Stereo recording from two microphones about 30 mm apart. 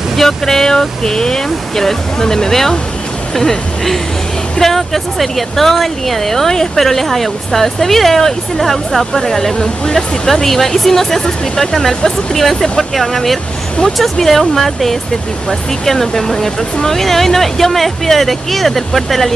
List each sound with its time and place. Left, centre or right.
0.2 s speech: centre
0.7 s a sound: left
1.8 s speech: centre
9.3 s speech: centre
11.2 s a sound: centre
12.4 s speech: centre